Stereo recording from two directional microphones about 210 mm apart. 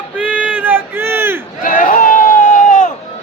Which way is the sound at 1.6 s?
40° left (ahead or behind).